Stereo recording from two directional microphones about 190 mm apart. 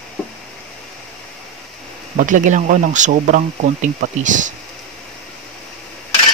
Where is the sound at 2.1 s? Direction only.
40° right (ahead or behind).